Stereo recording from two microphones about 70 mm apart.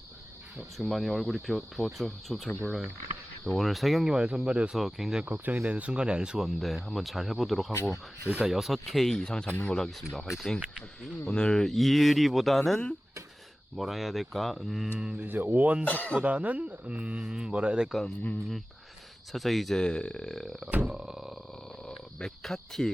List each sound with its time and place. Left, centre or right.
0.8 s speech: centre
4.8 s speech: centre
5.2 s speech: right; by 6.5 s centre
6.6 s speech: centre
7.8 s speech: left
8.4 s speech: centre
10.6 s speech: centre
11.3 s speech: centre
15.2 s speech: right
15.8 s speech: left
16.2 s speech: centre
18.0 s speech: left
19.3 s speech: centre
21.8 s cricket: centre